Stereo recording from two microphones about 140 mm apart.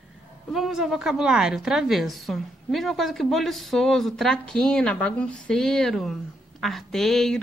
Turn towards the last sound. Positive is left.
turn(degrees=5)  # may be behind; listen again after turning